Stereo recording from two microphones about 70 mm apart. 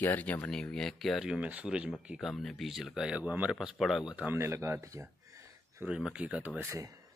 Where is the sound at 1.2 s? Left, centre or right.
Centre.